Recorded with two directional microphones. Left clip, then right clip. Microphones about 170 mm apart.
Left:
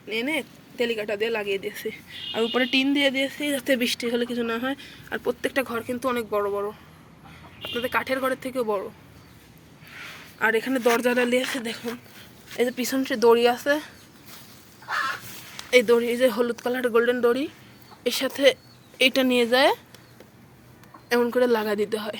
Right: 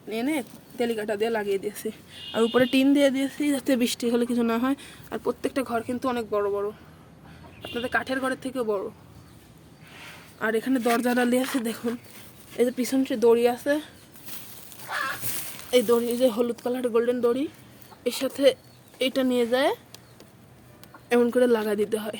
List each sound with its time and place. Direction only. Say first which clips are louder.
0.1 s speech: left 2 dB; 20° right (ahead or behind)
2.6 s speech: right 1 dB; 45° right (ahead or behind)
3.5 s speech: left 1 dB; 25° right (ahead or behind)
5.0 s speech: left 2 dB; 10° right (ahead or behind)
10.3 s a woman's voice: left 3 dB; 20° right (ahead or behind)
11.0 s speech: left 2 dB; 30° right (ahead or behind)
12.5 s speech: right 1 dB; 15° right (ahead or behind)
15.7 s speech: left 3 dB; centre (ahead or behind)
18.9 s speech: left 4 dB; 10° left (ahead or behind)
21.1 s a woman's voice: even; 20° right (ahead or behind)